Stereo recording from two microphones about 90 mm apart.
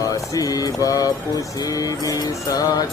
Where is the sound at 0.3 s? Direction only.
45° left (ahead or behind).